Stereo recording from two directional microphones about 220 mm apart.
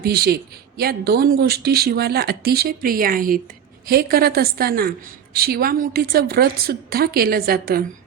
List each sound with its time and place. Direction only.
0.0 s speech: 45° right (ahead or behind)